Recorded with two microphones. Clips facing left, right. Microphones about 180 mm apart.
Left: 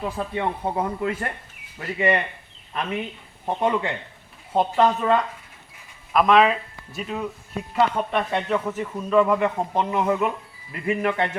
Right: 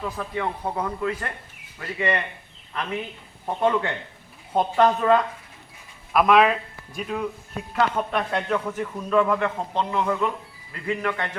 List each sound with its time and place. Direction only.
0.0 s speech: 25° left (ahead or behind)
3.4 s speech: 15° left (ahead or behind)
4.5 s a man's voice: centre (ahead or behind); by 11.3 s 25° left (ahead or behind)